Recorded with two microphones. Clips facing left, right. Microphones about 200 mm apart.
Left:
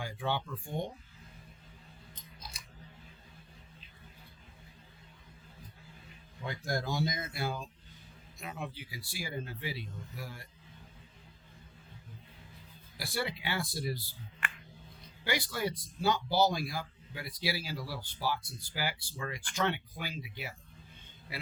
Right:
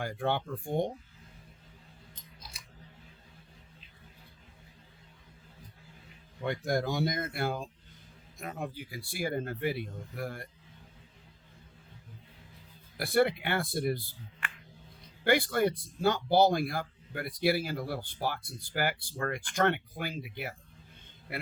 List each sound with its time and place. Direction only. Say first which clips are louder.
0.0 s speech: right 4 dB; 55° right (ahead or behind)
6.7 s speech: right 3 dB; 60° right (ahead or behind)
13.0 s speech: right 10 dB; 55° right (ahead or behind)
15.2 s speech: right 8 dB; 55° right (ahead or behind)